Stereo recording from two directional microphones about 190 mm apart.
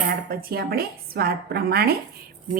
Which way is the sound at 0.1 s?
55° right (ahead or behind).